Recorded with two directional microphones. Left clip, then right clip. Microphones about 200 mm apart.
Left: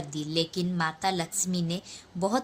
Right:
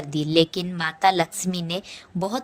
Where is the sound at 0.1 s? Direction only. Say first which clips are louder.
Right 10 dB; 40° right (ahead or behind).